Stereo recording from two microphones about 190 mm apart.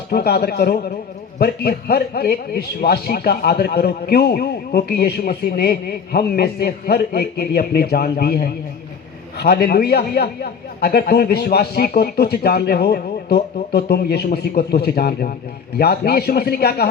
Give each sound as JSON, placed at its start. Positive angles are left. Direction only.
{"t": 0.1, "sound": "a man's voice", "side_deg": 55}